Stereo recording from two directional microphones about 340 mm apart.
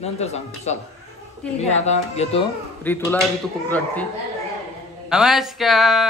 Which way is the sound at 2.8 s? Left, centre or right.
Centre.